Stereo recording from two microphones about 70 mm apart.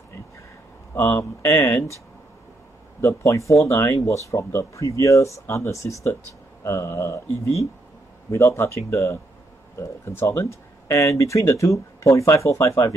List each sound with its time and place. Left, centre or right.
0.9 s speech: left
3.0 s speech: left